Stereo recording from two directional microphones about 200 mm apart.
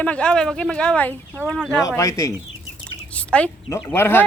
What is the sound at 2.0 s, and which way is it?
Speech, 15° left (ahead or behind).